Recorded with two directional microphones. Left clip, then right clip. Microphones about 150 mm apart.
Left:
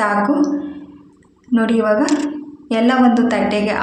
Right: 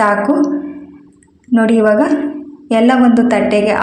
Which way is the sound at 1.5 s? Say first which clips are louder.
Right 5 dB; 25° right (ahead or behind).